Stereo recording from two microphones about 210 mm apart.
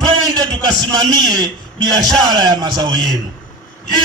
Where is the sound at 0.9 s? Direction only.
20° right (ahead or behind).